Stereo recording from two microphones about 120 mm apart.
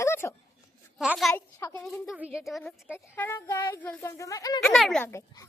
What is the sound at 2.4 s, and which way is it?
Speech, centre (ahead or behind).